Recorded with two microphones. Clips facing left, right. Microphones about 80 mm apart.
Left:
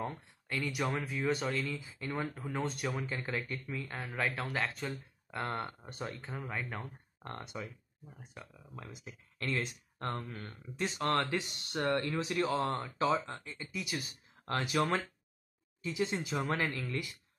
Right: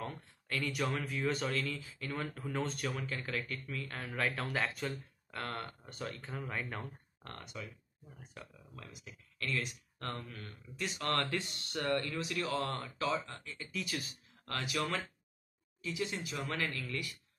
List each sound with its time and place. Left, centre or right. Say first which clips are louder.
0.0 s speech: left 3 dB; centre
2.9 s speech: left 2 dB; left; by 4.8 s centre
4.8 s speech: even; centre
6.2 s speech: left 1 dB; centre
7.2 s speech: left 4 dB; left
8.4 s speech: even; centre
8.7 s speech: left 4 dB; left
12.9 s speech: left 5 dB; left
13.7 s speech: even; centre
14.5 s speech: left 5 dB; left
15.8 s speech: left 4 dB; left